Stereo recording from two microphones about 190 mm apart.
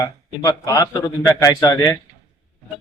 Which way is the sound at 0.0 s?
15° left (ahead or behind).